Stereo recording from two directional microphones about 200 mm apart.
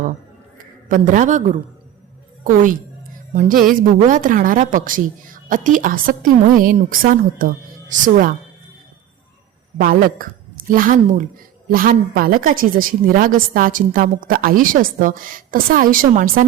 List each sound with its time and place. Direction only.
0.6 s a man's voice: 45° right (ahead or behind)
9.7 s a woman's voice: 45° right (ahead or behind)